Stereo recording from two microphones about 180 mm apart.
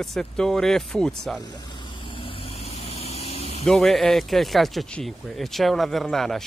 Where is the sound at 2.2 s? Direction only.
35° left (ahead or behind).